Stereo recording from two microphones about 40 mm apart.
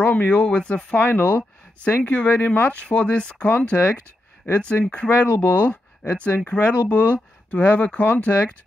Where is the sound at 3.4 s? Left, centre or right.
Left.